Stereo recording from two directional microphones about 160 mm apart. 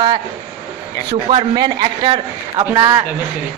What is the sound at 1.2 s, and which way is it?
A man's voice, 30° right (ahead or behind).